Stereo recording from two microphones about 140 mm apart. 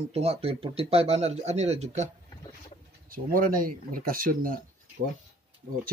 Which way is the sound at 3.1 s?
90° right.